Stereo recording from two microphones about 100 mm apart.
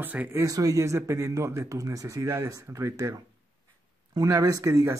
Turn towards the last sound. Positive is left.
turn(degrees=-30)  # may be behind; listen again after turning